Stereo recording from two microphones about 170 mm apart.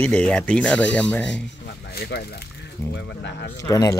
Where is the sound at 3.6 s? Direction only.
20° left (ahead or behind).